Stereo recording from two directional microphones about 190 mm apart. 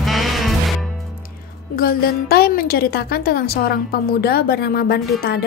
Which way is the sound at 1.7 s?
50° left (ahead or behind).